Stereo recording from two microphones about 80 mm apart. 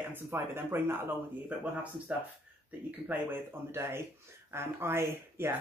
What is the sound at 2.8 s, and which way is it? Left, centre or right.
Speech, right.